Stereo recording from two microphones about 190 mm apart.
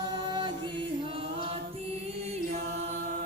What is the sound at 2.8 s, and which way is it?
Chant, 40° right (ahead or behind).